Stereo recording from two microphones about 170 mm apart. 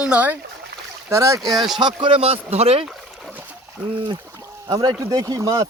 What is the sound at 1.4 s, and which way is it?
Speech, centre (ahead or behind).